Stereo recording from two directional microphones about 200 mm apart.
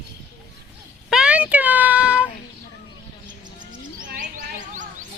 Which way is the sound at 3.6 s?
40° right (ahead or behind).